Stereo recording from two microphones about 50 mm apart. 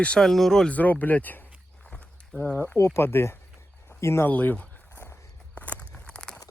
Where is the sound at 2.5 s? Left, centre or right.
Left.